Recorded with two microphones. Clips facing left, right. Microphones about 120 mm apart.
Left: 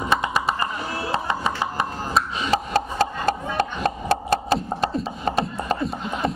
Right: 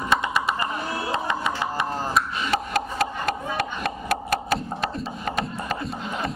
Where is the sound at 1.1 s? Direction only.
35° left (ahead or behind).